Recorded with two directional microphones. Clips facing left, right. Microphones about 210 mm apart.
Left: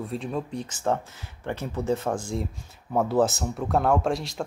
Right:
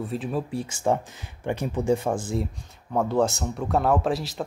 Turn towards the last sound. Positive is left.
turn(degrees=0)  # may be behind; listen again after turning